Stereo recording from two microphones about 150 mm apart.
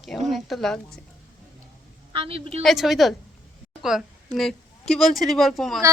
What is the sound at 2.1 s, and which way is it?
Speech, 40° right (ahead or behind).